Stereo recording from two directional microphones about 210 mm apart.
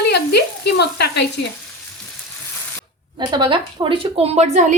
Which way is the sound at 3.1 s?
20° right (ahead or behind).